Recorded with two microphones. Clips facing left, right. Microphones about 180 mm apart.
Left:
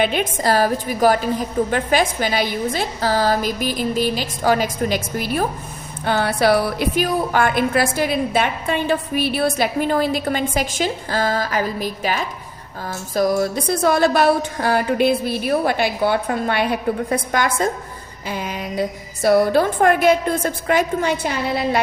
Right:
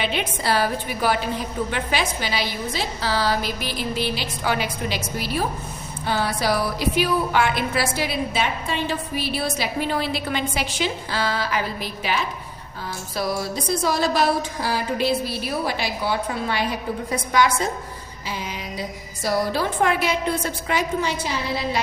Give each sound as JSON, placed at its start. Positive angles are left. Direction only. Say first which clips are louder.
{"t": 0.0, "sound": "a woman's voice", "louder": "left 6 dB", "side_deg": 45}